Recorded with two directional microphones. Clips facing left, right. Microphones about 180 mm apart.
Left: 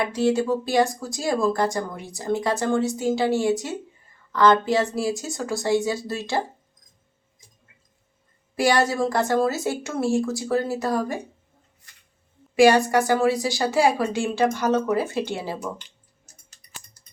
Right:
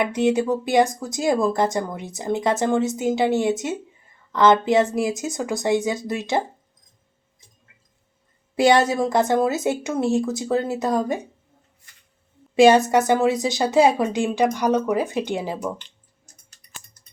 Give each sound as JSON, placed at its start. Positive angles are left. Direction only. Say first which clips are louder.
{"t": 0.0, "sound": "speech", "louder": "right 2 dB", "side_deg": -20}
{"t": 8.5, "sound": "speech", "louder": "right 4 dB", "side_deg": -20}
{"t": 12.5, "sound": "a woman's voice", "louder": "right 2 dB", "side_deg": -20}
{"t": 17.0, "sound": "a sound", "louder": "even", "side_deg": 10}